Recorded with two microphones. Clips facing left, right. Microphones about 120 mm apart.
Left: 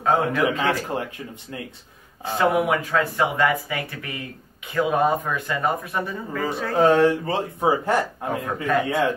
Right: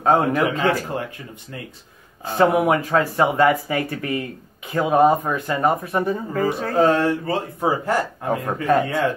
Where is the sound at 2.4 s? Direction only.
30° right (ahead or behind).